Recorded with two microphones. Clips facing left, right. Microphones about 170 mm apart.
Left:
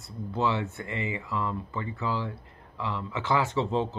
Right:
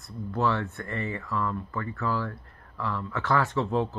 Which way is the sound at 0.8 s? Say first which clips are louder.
Even; 15° left (ahead or behind).